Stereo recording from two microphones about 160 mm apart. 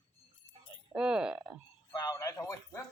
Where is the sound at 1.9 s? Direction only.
25° left (ahead or behind).